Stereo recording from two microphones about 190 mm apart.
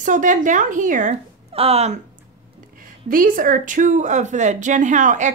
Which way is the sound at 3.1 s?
45° right (ahead or behind).